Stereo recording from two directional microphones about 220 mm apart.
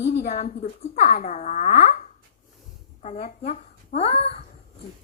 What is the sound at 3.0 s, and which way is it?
A woman's voice, 30° left (ahead or behind).